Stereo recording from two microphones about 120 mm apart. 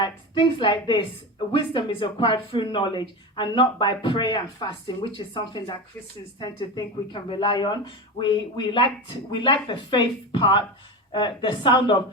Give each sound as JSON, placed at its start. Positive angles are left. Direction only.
{"t": 0.0, "sound": "speech", "side_deg": 40}